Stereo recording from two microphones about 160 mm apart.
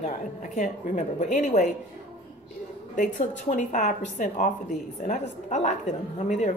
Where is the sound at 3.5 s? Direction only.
50° left (ahead or behind).